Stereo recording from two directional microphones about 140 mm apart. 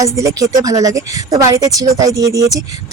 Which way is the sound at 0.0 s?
25° right (ahead or behind).